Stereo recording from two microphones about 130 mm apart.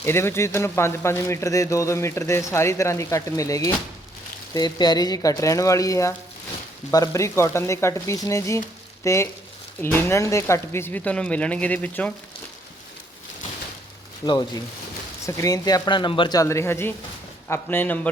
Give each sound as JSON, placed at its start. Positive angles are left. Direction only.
{"t": 0.0, "sound": "speech", "side_deg": 20}
{"t": 14.3, "sound": "speech", "side_deg": 30}
{"t": 16.4, "sound": "speech", "side_deg": 20}